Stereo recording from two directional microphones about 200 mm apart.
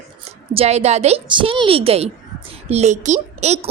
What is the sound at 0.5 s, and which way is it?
A woman's voice, 30° right (ahead or behind).